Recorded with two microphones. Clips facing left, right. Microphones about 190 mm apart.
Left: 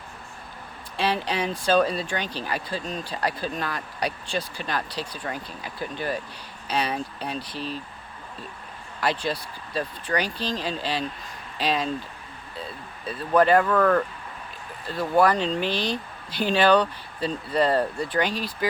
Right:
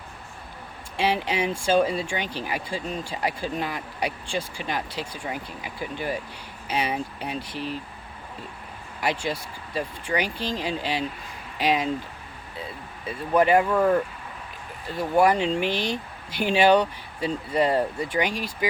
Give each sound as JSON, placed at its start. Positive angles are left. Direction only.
{"t": 0.9, "sound": "speech", "side_deg": -10}
{"t": 9.0, "sound": "speech", "side_deg": -15}
{"t": 15.7, "sound": "speech", "side_deg": -50}
{"t": 16.3, "sound": "speech", "side_deg": -15}